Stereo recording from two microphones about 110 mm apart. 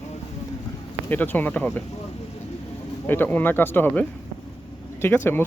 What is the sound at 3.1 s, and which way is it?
Speech, 20° left (ahead or behind).